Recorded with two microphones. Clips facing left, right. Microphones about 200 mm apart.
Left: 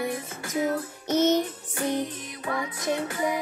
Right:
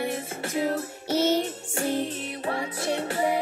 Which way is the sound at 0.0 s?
30° right (ahead or behind).